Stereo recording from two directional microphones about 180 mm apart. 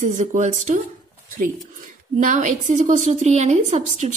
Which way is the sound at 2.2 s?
45° right (ahead or behind).